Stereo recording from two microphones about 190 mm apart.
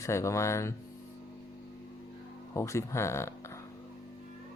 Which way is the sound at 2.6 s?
15° left (ahead or behind).